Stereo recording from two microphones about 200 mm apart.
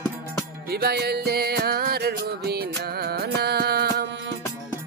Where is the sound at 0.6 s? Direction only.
50° right (ahead or behind).